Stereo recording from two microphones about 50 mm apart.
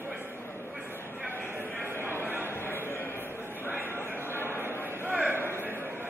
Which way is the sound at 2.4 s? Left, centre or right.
Left.